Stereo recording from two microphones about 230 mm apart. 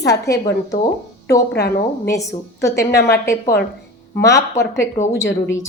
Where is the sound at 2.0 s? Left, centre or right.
Centre.